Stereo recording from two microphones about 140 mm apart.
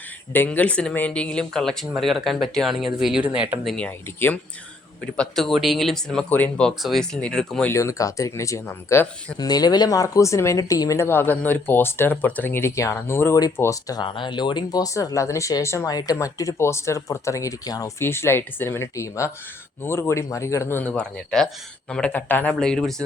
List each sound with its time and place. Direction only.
0.3 s speech: 10° left (ahead or behind)
7.7 s speech: 20° left (ahead or behind)
9.4 s speech: 30° left (ahead or behind); by 23.0 s 5° left (ahead or behind)